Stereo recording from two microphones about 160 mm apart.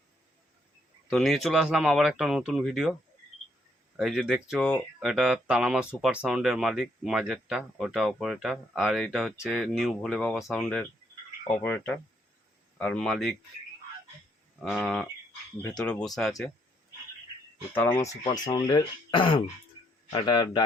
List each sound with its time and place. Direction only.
1.1 s speech: centre (ahead or behind)
3.9 s speech: 5° right (ahead or behind)
14.6 s speech: centre (ahead or behind)
17.7 s speech: 15° left (ahead or behind)